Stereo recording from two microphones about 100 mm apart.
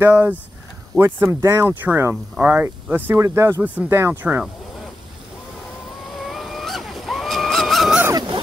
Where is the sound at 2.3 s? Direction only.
15° right (ahead or behind).